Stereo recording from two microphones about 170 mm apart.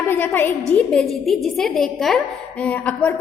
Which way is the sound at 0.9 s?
Centre (ahead or behind).